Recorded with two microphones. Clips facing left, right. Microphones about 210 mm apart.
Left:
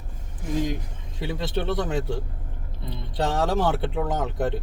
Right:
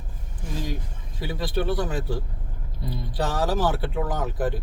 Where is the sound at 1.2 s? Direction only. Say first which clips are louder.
Even; 25° left (ahead or behind).